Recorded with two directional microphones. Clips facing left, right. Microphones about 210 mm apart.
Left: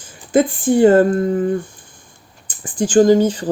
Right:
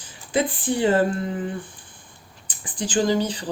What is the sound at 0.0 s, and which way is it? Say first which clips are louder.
Speech: left 8 dB; 45° left (ahead or behind).